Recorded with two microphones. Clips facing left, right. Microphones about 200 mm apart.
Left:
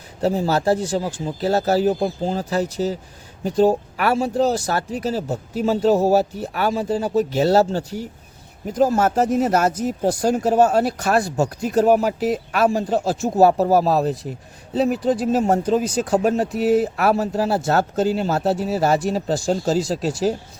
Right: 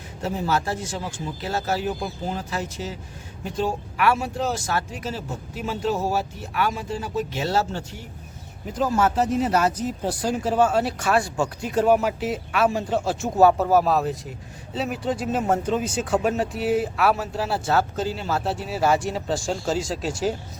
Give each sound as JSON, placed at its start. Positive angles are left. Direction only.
{"t": 0.2, "sound": "speech", "side_deg": 35}